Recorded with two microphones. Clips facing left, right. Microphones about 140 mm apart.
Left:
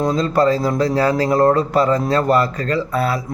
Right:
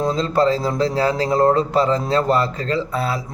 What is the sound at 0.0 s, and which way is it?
Speech, 25° right (ahead or behind).